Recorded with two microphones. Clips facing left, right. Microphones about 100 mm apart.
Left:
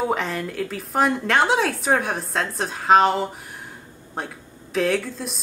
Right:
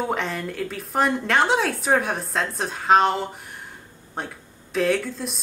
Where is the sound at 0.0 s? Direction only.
Centre (ahead or behind).